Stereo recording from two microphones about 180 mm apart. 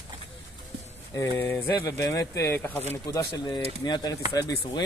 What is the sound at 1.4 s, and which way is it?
Speech, 10° left (ahead or behind).